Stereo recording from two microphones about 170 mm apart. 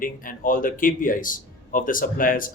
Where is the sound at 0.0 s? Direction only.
55° left (ahead or behind).